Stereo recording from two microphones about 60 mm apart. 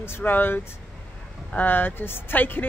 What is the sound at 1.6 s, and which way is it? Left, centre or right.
Speech, left.